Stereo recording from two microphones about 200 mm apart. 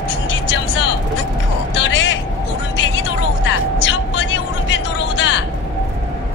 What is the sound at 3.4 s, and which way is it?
Music, 70° left (ahead or behind).